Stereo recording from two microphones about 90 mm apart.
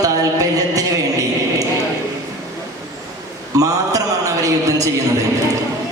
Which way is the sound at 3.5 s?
40° right (ahead or behind).